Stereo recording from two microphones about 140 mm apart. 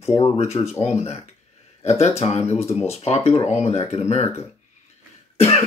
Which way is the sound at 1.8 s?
50° left (ahead or behind).